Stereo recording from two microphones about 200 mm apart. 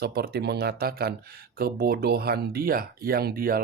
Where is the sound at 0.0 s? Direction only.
50° right (ahead or behind).